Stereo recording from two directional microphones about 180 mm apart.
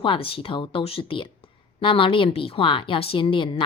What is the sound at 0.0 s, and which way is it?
A woman's voice, 30° left (ahead or behind).